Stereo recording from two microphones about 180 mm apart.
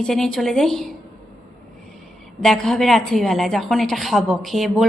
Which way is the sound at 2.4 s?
Centre (ahead or behind).